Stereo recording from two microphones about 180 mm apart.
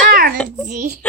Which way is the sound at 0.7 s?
45° right (ahead or behind).